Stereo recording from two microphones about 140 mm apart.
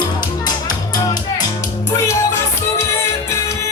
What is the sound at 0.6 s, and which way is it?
Music, 30° left (ahead or behind).